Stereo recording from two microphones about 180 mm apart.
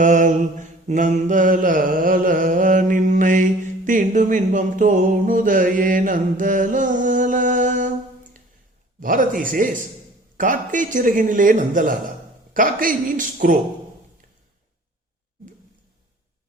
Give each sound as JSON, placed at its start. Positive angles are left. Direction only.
{"t": 0.0, "sound": "mantra", "side_deg": -45}
{"t": 3.8, "sound": "a sound", "side_deg": -45}
{"t": 9.0, "sound": "mantra", "side_deg": -50}